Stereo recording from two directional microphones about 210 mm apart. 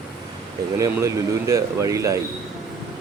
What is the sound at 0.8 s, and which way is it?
Speech, 15° right (ahead or behind).